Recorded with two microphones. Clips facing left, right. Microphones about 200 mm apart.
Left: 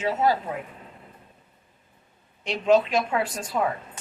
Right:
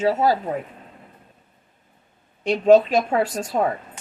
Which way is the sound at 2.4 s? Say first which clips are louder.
Right 6 dB; 40° right (ahead or behind).